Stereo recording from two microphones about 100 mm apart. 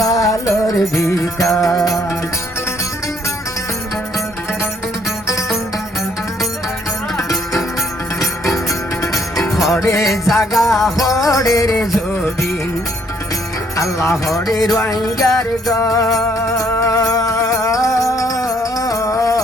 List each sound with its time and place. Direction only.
0.0 s music: 35° left (ahead or behind)
8.2 s music: centre (ahead or behind)
9.8 s music: 30° left (ahead or behind)
10.1 s music: centre (ahead or behind)
11.2 s music: 35° left (ahead or behind)
13.7 s music: 30° left (ahead or behind)
14.9 s music: centre (ahead or behind)
15.7 s music: 35° left (ahead or behind)